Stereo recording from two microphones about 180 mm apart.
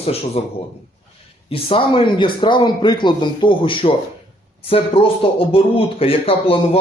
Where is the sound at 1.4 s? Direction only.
30° left (ahead or behind).